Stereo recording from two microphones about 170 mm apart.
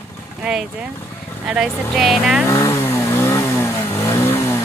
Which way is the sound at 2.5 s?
15° left (ahead or behind).